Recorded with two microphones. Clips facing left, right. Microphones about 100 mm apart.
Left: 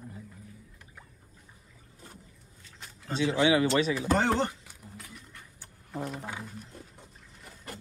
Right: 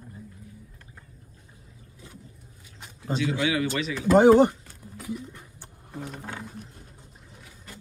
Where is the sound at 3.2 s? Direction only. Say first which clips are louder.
Left 3 dB; 25° left (ahead or behind).